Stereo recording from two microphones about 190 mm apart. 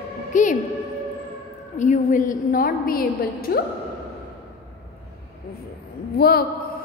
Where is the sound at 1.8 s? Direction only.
40° left (ahead or behind).